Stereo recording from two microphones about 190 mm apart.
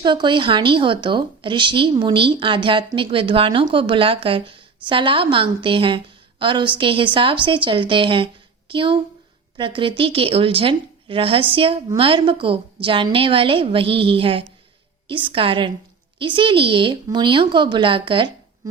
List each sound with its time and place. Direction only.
0.0 s speech: 25° right (ahead or behind)